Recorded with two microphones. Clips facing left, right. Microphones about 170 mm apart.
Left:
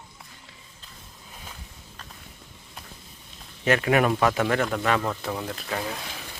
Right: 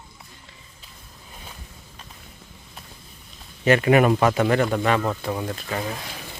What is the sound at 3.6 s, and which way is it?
Speech, centre (ahead or behind).